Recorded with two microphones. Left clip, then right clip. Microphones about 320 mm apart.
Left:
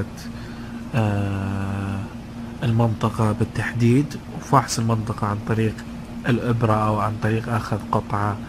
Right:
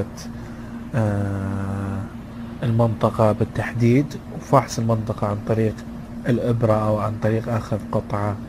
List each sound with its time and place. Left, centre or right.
0.9 s a man's voice: centre
2.6 s a man's voice: centre